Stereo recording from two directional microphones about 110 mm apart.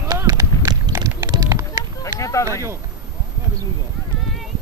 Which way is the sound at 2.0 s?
30° left (ahead or behind).